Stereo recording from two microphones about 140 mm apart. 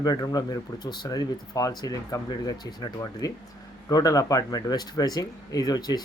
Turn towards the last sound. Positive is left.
turn(degrees=30)  # may be behind; listen again after turning